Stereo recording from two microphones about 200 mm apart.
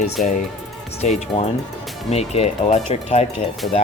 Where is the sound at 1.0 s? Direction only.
35° left (ahead or behind).